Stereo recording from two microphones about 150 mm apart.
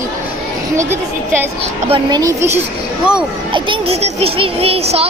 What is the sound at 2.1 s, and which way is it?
A child's voice, 25° right (ahead or behind).